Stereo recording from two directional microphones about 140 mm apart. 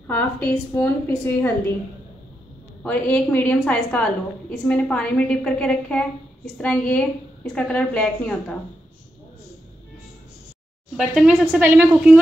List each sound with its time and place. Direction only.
0.0 s a woman's voice: 10° left (ahead or behind)
2.8 s a woman's voice: 10° left (ahead or behind)
11.0 s a woman's voice: 5° right (ahead or behind)